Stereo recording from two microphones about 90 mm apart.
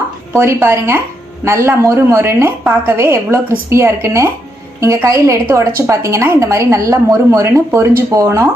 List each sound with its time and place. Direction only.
0.3 s a woman's voice: 30° right (ahead or behind)